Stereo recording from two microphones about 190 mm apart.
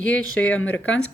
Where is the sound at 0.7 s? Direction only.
85° left.